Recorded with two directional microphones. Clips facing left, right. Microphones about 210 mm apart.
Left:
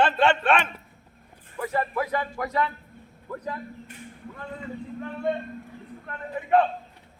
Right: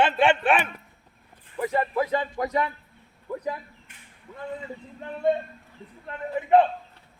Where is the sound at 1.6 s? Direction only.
20° right (ahead or behind).